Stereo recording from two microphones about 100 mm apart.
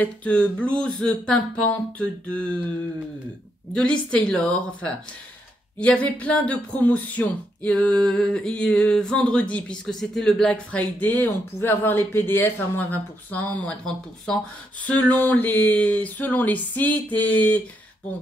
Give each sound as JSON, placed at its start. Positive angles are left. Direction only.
{"t": 0.0, "sound": "speech", "side_deg": 15}
{"t": 3.7, "sound": "speech", "side_deg": 10}